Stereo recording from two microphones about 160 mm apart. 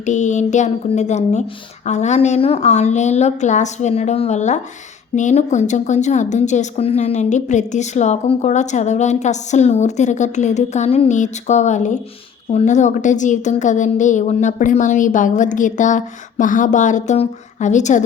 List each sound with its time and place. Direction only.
0.0 s speech: 50° left (ahead or behind)